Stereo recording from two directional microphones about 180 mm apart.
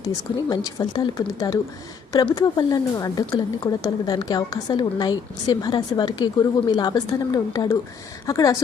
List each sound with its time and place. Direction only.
0.5 s a woman's voice: 20° left (ahead or behind)